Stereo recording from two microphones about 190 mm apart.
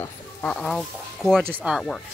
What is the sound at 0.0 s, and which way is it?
Speech, 5° left (ahead or behind).